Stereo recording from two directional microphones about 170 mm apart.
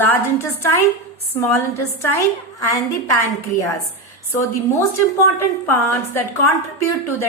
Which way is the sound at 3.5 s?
15° left (ahead or behind).